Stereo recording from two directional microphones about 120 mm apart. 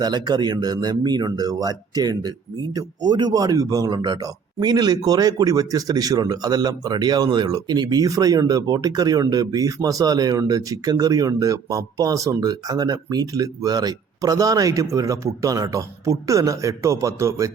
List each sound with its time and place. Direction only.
0.0 s speech: 35° right (ahead or behind)